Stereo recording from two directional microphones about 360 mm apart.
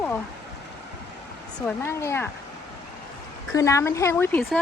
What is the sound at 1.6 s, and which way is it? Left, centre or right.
Speech, centre.